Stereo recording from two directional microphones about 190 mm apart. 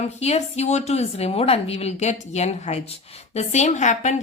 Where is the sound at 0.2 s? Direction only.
35° left (ahead or behind).